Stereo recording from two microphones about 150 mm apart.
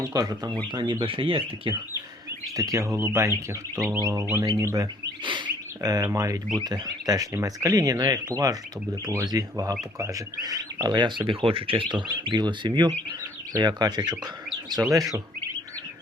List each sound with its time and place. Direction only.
0.1 s speech: 25° right (ahead or behind)
2.6 s speech: 20° right (ahead or behind)
5.2 s speech: 30° right (ahead or behind)